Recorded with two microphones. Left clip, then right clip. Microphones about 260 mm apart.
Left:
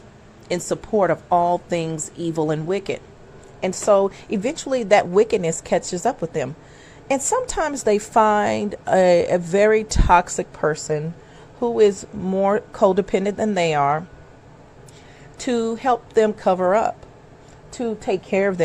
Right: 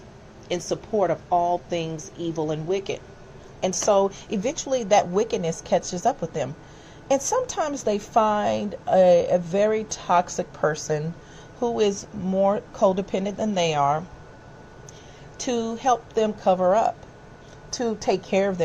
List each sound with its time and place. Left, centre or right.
0.4 s a woman's voice: left
15.4 s a woman's voice: left
17.7 s a woman's voice: centre
18.3 s a woman's voice: left